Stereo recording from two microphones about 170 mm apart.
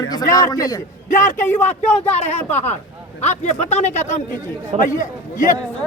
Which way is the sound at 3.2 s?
40° left (ahead or behind).